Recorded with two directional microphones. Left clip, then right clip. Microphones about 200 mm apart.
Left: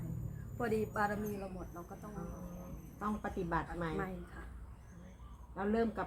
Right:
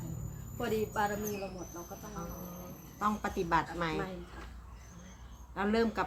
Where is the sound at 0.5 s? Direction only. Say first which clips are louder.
Right 2 dB; centre (ahead or behind).